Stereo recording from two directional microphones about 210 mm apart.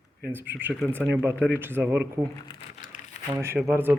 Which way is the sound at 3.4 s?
15° right (ahead or behind).